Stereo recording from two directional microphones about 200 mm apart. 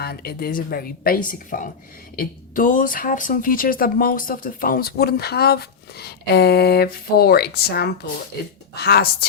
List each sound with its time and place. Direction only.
0.0 s speech: 50° left (ahead or behind)